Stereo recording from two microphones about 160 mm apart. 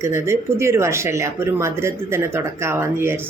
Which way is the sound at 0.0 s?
15° right (ahead or behind).